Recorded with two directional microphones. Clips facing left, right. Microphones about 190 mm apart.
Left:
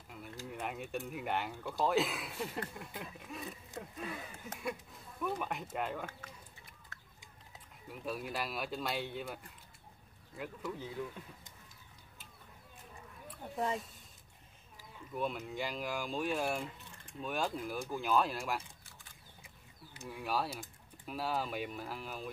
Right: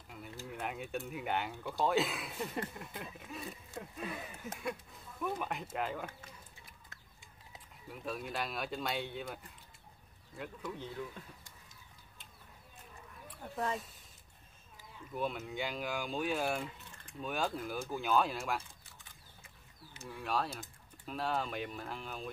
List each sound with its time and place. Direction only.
0.5 s speech: centre (ahead or behind)
7.9 s speech: centre (ahead or behind)
13.4 s speech: 20° left (ahead or behind)
15.1 s speech: centre (ahead or behind)
20.0 s speech: 5° left (ahead or behind)